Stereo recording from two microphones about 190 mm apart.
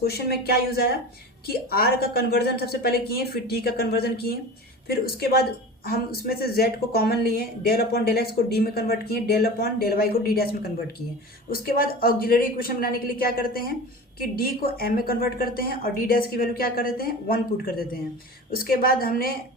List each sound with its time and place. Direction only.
0.0 s a woman's voice: 55° left (ahead or behind)